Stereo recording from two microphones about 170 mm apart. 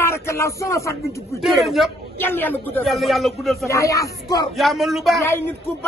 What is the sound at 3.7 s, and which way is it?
Speech, 20° left (ahead or behind).